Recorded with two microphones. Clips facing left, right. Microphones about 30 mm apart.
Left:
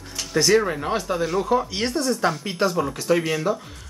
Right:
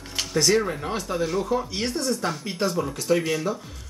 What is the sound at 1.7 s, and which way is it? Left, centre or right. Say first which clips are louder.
Speech: left 3 dB; left.